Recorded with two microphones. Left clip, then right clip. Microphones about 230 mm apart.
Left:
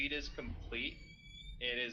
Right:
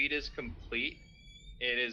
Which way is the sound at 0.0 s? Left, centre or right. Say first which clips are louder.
Right 6 dB; right.